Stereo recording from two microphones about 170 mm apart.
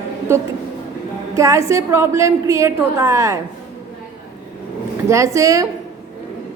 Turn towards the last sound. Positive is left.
turn(degrees=-20)  # may be behind; listen again after turning